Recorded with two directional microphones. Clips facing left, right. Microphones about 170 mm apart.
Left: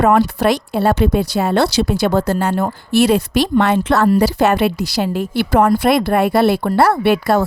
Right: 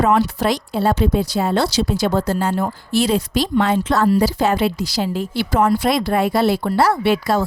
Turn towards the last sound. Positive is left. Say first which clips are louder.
# left 3 dB
turn(degrees=60)  # may be behind; listen again after turning